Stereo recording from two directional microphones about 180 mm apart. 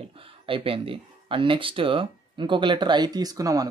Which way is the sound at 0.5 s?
30° right (ahead or behind).